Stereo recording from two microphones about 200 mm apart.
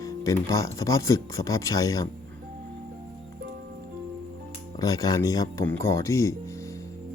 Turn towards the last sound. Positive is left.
turn(degrees=15)  # may be behind; listen again after turning